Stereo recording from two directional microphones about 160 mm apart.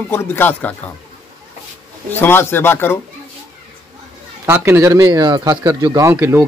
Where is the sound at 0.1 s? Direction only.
15° left (ahead or behind).